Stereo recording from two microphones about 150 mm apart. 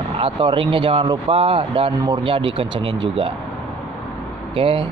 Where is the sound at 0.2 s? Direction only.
35° right (ahead or behind).